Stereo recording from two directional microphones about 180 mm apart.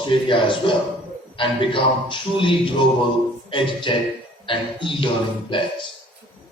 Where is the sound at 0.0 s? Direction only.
25° left (ahead or behind).